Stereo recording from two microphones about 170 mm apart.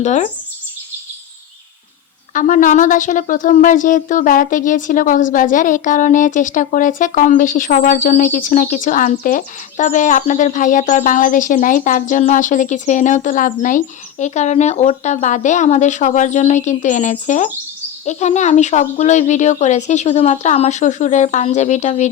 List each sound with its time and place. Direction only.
0.0 s a woman's voice: 45° left (ahead or behind)
2.3 s a woman's voice: 50° left (ahead or behind)